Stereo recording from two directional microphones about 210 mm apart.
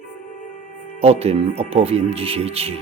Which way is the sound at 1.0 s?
30° right (ahead or behind).